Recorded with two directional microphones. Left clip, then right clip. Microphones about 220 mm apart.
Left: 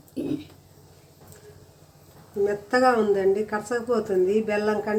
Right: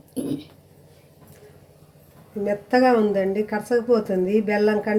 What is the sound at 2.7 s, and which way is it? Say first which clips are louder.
Speech: right 3 dB; 10° right (ahead or behind).